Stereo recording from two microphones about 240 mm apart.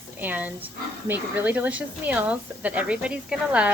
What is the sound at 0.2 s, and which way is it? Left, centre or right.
Speech, centre.